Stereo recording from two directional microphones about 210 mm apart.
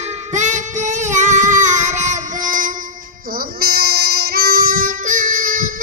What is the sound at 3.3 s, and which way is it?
Child singing, 45° right (ahead or behind).